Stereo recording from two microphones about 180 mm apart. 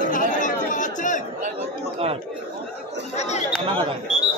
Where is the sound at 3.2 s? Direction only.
40° left (ahead or behind).